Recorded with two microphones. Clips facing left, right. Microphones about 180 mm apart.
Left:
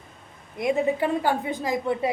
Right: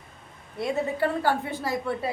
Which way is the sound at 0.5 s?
15° left (ahead or behind).